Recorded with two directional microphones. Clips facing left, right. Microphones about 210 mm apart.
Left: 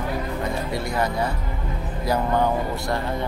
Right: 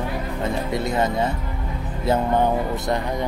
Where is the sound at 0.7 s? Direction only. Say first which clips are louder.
Right 4 dB; 20° right (ahead or behind).